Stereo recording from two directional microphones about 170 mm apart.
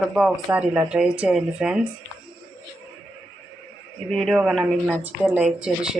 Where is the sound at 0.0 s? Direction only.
5° right (ahead or behind).